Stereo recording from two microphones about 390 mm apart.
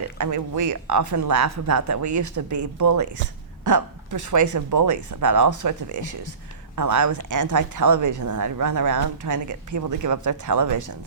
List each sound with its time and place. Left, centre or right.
0.2 s a woman's voice: right